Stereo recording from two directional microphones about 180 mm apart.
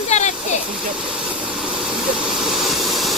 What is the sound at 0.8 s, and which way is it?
Hiss, 5° right (ahead or behind).